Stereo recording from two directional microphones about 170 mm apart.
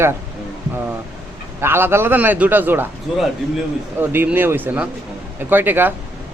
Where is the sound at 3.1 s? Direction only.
Centre (ahead or behind).